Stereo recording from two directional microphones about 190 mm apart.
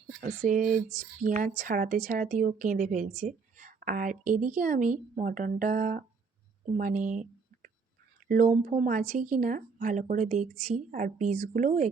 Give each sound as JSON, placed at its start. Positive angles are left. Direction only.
{"t": 0.2, "sound": "a woman's voice", "side_deg": -45}